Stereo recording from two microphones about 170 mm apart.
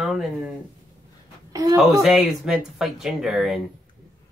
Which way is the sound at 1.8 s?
Centre (ahead or behind).